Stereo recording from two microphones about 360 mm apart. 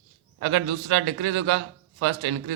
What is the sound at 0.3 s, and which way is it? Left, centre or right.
A man's voice, right.